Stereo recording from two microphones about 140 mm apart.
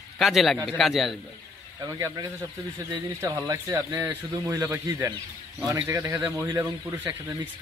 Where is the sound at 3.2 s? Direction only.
25° right (ahead or behind).